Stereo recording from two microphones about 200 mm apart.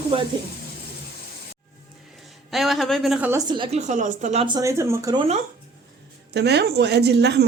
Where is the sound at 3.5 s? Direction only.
25° right (ahead or behind).